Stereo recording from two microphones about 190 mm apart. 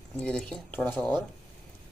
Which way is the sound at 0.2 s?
5° left (ahead or behind).